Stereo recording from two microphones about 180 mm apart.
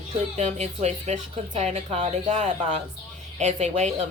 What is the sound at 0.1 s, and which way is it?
A woman's voice, 40° right (ahead or behind).